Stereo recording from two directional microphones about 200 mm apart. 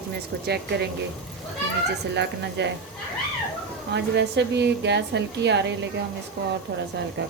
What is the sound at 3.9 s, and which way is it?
A woman's voice, 60° right (ahead or behind).